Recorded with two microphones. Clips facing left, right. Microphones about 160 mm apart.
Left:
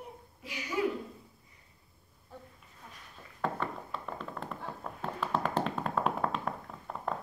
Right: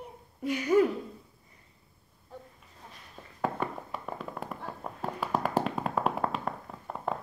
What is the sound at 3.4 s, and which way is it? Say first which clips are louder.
Tap: right 2 dB; 15° right (ahead or behind).